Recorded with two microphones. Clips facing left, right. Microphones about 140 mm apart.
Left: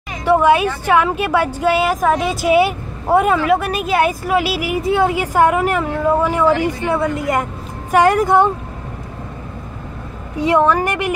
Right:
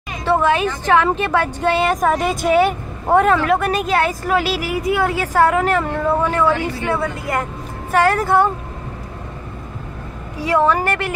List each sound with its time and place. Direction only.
0.2 s speech: 15° left (ahead or behind)
4.8 s a woman's voice: 25° left (ahead or behind)
5.1 s speech: 15° left (ahead or behind)
10.7 s speech: 15° left (ahead or behind)